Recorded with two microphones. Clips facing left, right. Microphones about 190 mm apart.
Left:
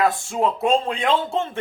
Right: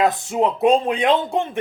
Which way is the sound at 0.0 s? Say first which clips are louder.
Right 2 dB; 20° right (ahead or behind).